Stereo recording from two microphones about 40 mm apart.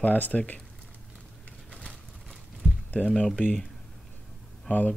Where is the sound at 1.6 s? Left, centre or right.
Left.